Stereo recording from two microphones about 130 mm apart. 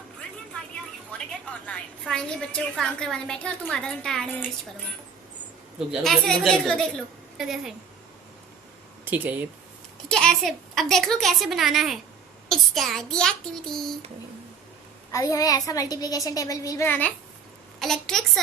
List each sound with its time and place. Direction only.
1.6 s a woman's voice: 5° left (ahead or behind)
5.9 s a woman's voice: centre (ahead or behind)
9.0 s speech: 15° right (ahead or behind)
10.1 s a woman's voice: 5° left (ahead or behind)
15.1 s a woman's voice: 25° left (ahead or behind)
17.7 s a woman's voice: 5° left (ahead or behind)